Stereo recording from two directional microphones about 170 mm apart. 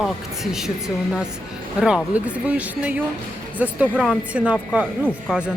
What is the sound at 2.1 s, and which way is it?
A woman's voice, 10° right (ahead or behind).